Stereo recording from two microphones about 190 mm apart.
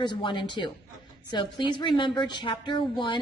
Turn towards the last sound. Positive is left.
turn(degrees=25)  # may be behind; listen again after turning